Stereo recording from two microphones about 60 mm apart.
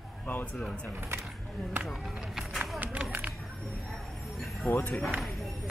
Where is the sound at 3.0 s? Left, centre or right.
Right.